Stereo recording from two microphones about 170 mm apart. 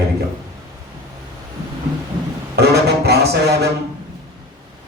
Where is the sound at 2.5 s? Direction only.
70° right (ahead or behind).